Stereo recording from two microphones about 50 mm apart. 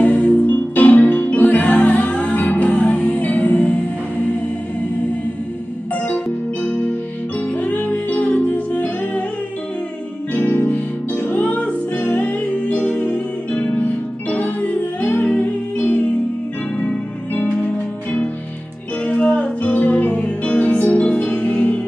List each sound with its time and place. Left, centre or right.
0.0 s music: left
6.0 s keyboard: left
7.5 s music: left
10.3 s music: left
17.3 s music: left
19.0 s music: left